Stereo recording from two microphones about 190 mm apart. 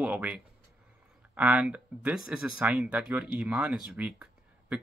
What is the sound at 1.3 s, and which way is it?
Speech, 5° right (ahead or behind).